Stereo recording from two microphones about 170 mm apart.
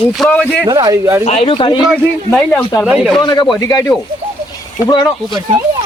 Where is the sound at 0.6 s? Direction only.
20° right (ahead or behind).